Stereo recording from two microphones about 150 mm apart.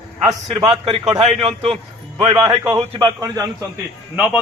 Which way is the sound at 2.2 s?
30° right (ahead or behind).